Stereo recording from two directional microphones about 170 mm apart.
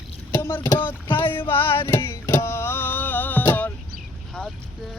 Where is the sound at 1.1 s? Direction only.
30° left (ahead or behind).